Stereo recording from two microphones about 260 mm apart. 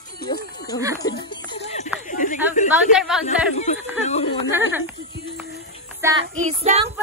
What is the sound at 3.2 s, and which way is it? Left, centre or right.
Speech, left.